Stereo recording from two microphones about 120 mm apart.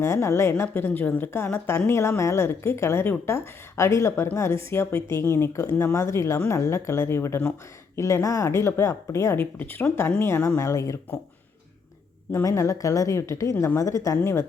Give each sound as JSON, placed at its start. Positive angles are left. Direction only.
{"t": 0.0, "sound": "speech", "side_deg": 20}
{"t": 12.3, "sound": "speech", "side_deg": 25}